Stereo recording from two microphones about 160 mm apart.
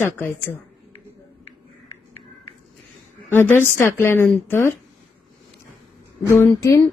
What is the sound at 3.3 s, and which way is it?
A woman's voice, 15° left (ahead or behind).